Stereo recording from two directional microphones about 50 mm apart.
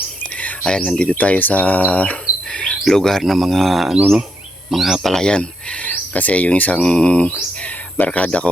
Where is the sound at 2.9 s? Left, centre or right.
Centre.